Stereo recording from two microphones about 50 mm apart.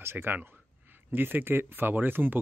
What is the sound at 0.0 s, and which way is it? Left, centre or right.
Speech, right.